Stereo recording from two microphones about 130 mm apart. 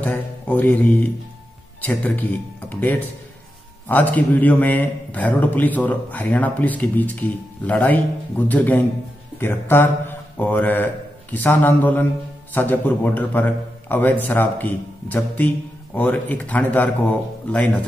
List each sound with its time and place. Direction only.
0.0 s a man's voice: 10° left (ahead or behind)